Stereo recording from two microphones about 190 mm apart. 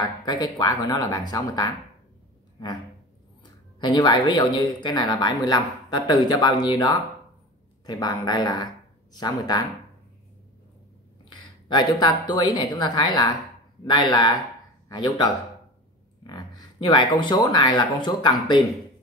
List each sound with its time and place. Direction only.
0.0 s speech: 20° left (ahead or behind)
11.2 s speech: 20° left (ahead or behind)
16.3 s speech: 20° left (ahead or behind)